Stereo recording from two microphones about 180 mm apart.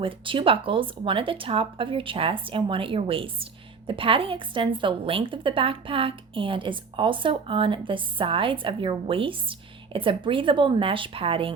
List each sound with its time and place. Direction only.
0.0 s speech: 30° right (ahead or behind)